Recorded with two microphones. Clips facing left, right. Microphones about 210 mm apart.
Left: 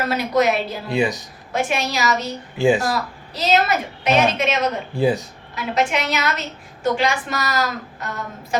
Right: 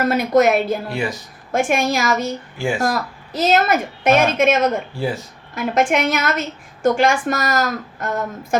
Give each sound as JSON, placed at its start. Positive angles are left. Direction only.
{"t": 0.1, "sound": "a woman's voice", "side_deg": -50}
{"t": 0.9, "sound": "speech", "side_deg": 15}
{"t": 1.5, "sound": "a woman's voice", "side_deg": -50}
{"t": 2.6, "sound": "speech", "side_deg": 20}
{"t": 2.8, "sound": "a woman's voice", "side_deg": -50}
{"t": 4.9, "sound": "speech", "side_deg": 15}
{"t": 5.5, "sound": "a woman's voice", "side_deg": -50}